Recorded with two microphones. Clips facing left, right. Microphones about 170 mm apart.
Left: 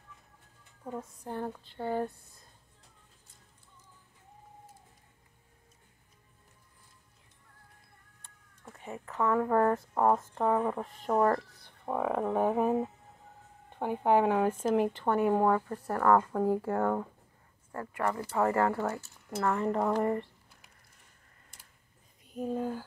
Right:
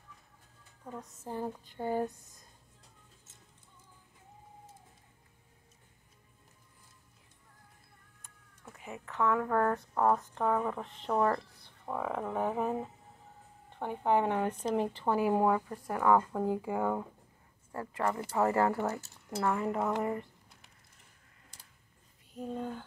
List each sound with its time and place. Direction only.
1.0 s speech: 5° right (ahead or behind)
2.1 s speech: 45° right (ahead or behind)
9.1 s speech: 5° left (ahead or behind)
17.7 s speech: 20° right (ahead or behind)
19.4 s speech: 5° right (ahead or behind)
22.3 s speech: 10° left (ahead or behind)